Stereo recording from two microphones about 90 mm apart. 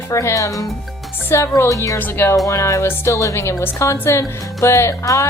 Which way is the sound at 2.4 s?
35° left (ahead or behind).